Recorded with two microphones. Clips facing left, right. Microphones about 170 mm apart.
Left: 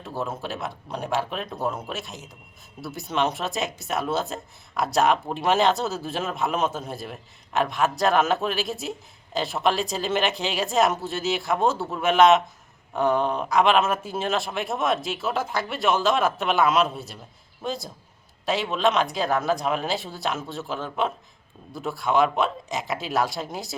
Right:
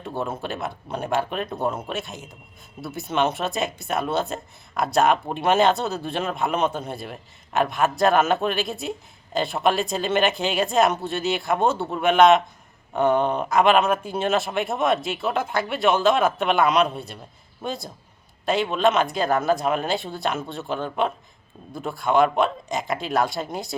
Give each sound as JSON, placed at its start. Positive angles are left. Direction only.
{"t": 0.2, "sound": "speech", "side_deg": 0}